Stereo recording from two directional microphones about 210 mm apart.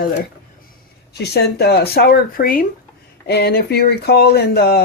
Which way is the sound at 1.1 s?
50° left (ahead or behind).